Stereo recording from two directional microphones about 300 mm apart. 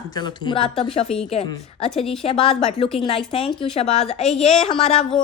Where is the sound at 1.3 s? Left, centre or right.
Centre.